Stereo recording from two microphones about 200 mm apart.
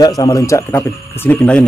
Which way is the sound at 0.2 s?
15° left (ahead or behind).